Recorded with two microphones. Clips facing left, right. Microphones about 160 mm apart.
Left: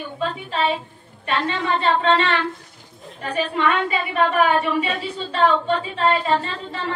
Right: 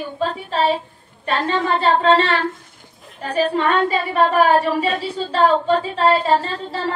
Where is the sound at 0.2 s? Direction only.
40° right (ahead or behind).